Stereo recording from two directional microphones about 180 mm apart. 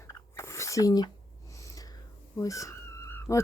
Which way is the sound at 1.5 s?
15° left (ahead or behind).